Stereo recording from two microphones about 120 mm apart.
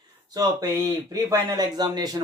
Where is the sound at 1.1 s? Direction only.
35° right (ahead or behind).